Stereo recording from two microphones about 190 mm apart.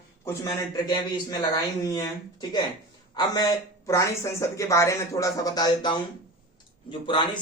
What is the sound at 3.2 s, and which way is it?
Speech, 20° left (ahead or behind).